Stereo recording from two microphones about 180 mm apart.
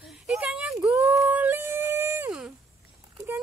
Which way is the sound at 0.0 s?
Centre (ahead or behind).